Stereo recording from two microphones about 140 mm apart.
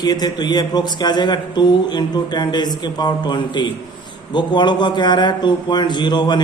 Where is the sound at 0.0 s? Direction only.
30° left (ahead or behind).